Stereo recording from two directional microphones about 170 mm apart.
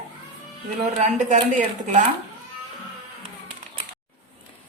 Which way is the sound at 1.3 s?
45° right (ahead or behind).